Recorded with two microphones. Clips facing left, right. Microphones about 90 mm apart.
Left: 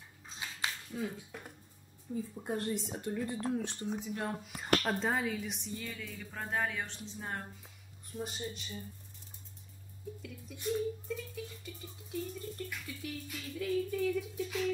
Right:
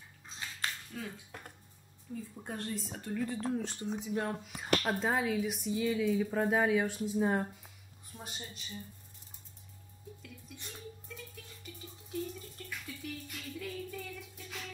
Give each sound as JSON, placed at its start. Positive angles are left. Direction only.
{"t": 0.4, "sound": "dishes", "side_deg": 15}
{"t": 1.1, "sound": "speech", "side_deg": 0}
{"t": 2.3, "sound": "speech", "side_deg": 10}
{"t": 10.2, "sound": "speech", "side_deg": 0}